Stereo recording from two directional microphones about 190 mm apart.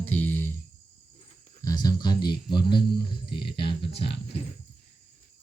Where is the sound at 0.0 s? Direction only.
10° left (ahead or behind).